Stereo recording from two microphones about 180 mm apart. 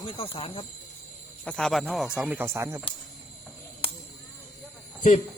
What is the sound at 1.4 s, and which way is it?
Speech, 5° left (ahead or behind).